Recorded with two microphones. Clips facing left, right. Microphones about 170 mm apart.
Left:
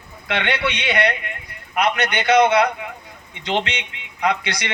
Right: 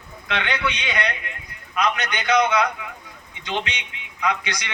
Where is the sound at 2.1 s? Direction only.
75° left (ahead or behind).